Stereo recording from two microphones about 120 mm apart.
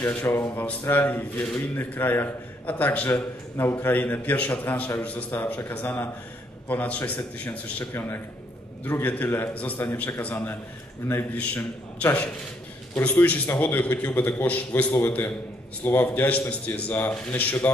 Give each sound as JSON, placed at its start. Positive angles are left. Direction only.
{"t": 0.0, "sound": "a man's voice", "side_deg": 20}